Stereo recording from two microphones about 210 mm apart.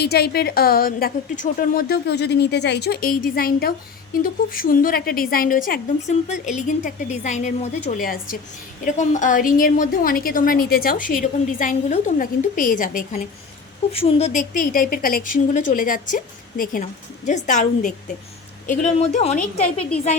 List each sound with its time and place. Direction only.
0.0 s a woman's voice: 50° left (ahead or behind)
13.9 s a woman's voice: 30° left (ahead or behind)